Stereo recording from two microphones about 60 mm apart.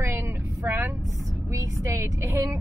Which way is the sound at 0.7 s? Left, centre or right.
Right.